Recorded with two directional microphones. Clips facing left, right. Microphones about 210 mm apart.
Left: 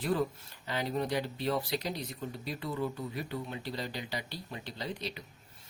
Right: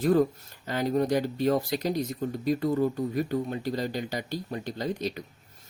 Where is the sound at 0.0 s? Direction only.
45° right (ahead or behind).